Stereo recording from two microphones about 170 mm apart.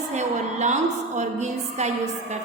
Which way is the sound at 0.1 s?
45° right (ahead or behind).